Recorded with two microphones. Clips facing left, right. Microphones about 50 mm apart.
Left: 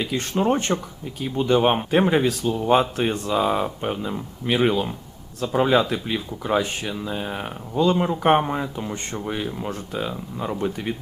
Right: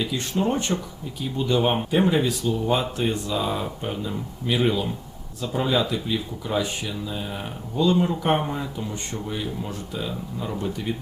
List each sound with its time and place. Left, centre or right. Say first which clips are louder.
0.0 s speech: left 2 dB; left